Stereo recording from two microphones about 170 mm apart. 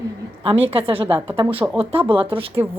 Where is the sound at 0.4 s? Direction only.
35° right (ahead or behind).